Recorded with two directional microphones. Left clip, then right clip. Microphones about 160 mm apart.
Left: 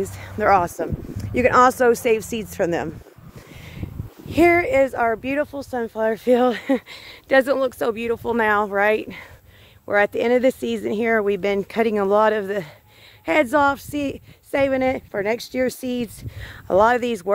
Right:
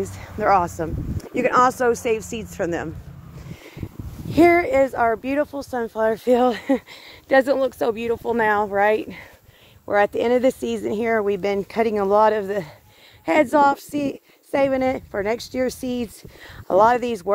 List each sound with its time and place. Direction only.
0.2 s speech: 45° left (ahead or behind)
4.3 s speech: 20° left (ahead or behind)